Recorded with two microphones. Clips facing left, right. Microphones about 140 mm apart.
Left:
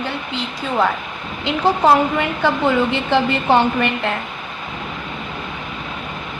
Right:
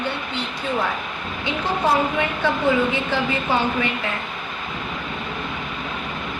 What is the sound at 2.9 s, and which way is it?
Speech, 70° left (ahead or behind).